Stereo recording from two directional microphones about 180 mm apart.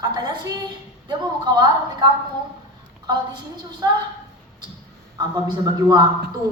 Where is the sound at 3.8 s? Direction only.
15° right (ahead or behind).